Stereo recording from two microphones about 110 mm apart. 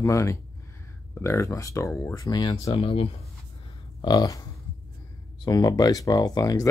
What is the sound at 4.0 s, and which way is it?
Speech, 40° left (ahead or behind).